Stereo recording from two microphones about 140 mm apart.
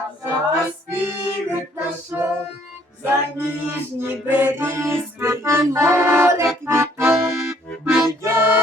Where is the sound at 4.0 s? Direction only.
15° right (ahead or behind).